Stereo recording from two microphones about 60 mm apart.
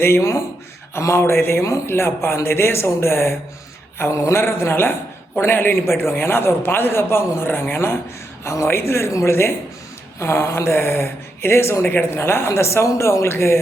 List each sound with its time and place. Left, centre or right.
0.0 s a man's voice: left
3.9 s a sound: left
4.3 s a man's voice: left